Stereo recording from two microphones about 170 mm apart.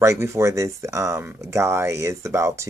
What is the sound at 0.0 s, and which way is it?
Speech, 15° right (ahead or behind).